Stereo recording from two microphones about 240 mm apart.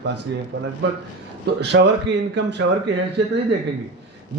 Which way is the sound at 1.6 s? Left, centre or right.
Right.